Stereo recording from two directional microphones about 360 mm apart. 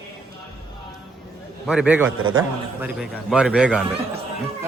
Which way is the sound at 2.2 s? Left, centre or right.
Right.